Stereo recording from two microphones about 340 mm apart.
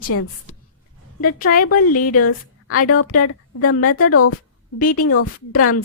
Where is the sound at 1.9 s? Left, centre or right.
Left.